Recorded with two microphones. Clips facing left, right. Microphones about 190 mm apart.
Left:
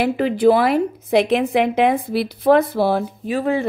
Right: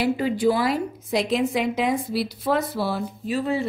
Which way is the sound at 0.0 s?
60° left (ahead or behind).